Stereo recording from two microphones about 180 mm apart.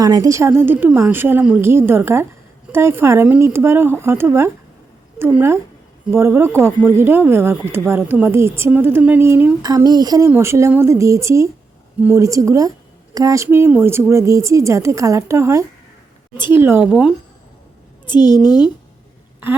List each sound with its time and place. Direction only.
0.0 s speech: 20° right (ahead or behind)
18.0 s a woman's voice: 25° left (ahead or behind)